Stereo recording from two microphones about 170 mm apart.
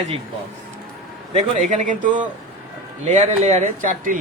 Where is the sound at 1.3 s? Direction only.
45° right (ahead or behind).